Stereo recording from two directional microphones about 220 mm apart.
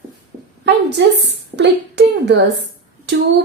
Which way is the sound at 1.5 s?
55° right (ahead or behind).